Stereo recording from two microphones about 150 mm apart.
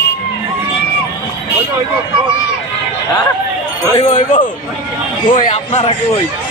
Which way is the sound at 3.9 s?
50° left (ahead or behind).